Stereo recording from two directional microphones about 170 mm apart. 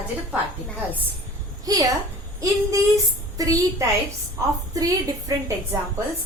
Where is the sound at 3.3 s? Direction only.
20° right (ahead or behind).